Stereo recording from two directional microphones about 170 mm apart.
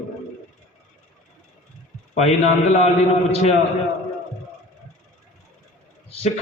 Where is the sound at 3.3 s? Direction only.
35° left (ahead or behind).